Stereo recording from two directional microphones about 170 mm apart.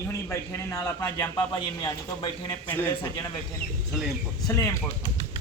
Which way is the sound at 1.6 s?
30° left (ahead or behind).